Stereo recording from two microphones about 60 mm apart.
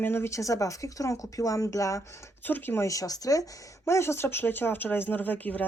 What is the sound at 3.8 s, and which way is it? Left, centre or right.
Speech, left.